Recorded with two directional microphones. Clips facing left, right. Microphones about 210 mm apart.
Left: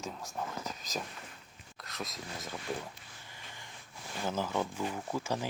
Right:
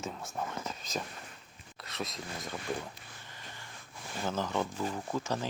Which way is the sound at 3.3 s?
15° left (ahead or behind).